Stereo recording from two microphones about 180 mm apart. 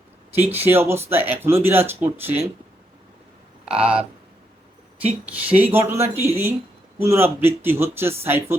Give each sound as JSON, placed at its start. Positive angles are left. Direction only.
{"t": 0.5, "sound": "speech", "side_deg": -10}
{"t": 3.8, "sound": "speech", "side_deg": -5}
{"t": 5.2, "sound": "speech", "side_deg": -10}